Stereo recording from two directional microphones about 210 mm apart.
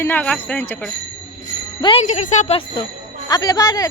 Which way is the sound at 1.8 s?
25° left (ahead or behind).